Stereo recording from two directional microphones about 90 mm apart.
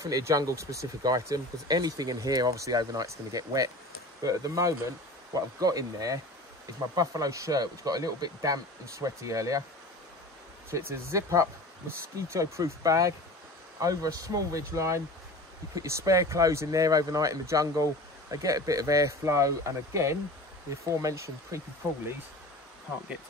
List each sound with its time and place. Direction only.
0.0 s speech: 40° right (ahead or behind)
10.7 s speech: 30° right (ahead or behind)